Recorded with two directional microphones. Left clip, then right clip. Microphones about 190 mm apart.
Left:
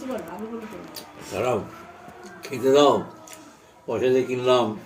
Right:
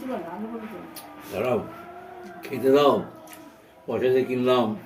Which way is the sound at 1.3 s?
25° left (ahead or behind).